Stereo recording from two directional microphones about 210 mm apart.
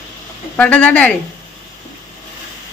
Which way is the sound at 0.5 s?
5° left (ahead or behind).